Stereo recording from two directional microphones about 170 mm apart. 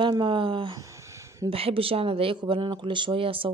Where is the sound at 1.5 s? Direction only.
35° right (ahead or behind).